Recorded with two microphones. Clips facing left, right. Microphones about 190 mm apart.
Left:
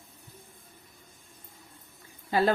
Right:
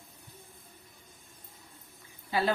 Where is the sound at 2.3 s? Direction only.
45° left (ahead or behind).